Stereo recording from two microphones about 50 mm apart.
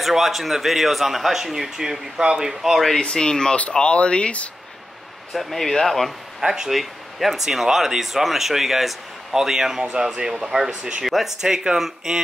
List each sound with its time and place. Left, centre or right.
0.0 s speech: centre
3.0 s speech: centre
5.3 s speech: centre
6.4 s speech: centre
11.1 s speech: centre